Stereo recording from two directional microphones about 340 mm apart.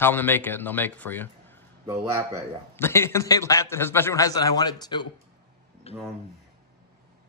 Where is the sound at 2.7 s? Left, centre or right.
Centre.